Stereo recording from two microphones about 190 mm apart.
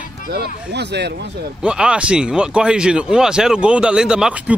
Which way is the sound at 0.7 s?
60° right (ahead or behind).